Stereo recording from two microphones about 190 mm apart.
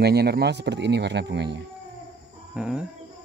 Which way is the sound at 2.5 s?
5° right (ahead or behind).